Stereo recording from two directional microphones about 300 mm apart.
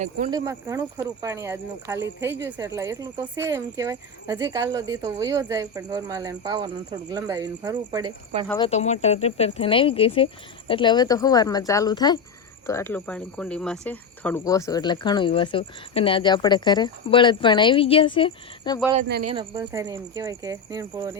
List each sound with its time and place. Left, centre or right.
0.3 s speech: centre
8.4 s speech: centre
19.3 s speech: centre